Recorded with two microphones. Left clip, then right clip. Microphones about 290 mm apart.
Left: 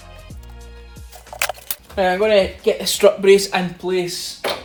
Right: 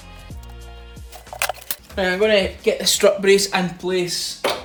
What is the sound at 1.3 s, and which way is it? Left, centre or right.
Speech, centre.